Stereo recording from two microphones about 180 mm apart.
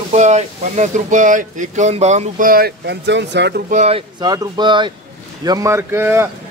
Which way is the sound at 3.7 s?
35° right (ahead or behind).